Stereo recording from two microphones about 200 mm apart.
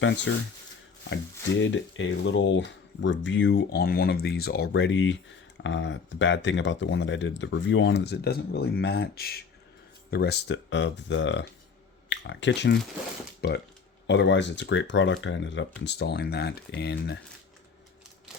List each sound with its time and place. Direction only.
0.3 s speech: 70° left (ahead or behind)